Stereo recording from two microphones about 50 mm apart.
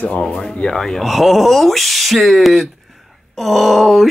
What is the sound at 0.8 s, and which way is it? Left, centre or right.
Speech, centre.